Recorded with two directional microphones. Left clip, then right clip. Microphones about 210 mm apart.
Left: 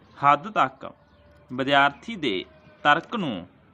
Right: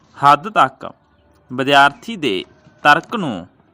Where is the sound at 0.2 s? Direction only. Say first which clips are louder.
Right 8 dB; 35° right (ahead or behind).